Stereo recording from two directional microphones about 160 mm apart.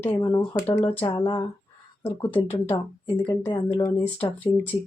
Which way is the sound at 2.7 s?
20° left (ahead or behind).